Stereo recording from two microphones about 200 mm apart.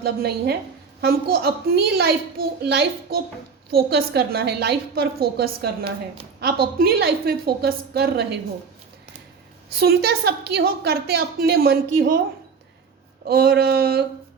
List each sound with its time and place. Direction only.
0.0 s a child's voice: 50° right (ahead or behind)
9.7 s a child's voice: 50° right (ahead or behind)
13.2 s a child's voice: 50° right (ahead or behind)